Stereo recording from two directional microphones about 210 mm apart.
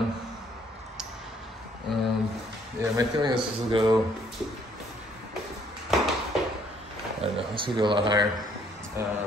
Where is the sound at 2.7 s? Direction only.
20° right (ahead or behind).